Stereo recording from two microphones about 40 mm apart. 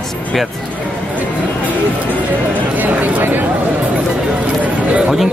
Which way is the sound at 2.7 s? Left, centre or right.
Right.